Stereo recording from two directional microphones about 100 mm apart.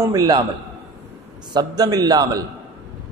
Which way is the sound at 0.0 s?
35° right (ahead or behind).